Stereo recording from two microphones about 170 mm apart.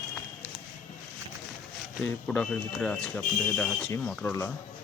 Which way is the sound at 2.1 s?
5° left (ahead or behind).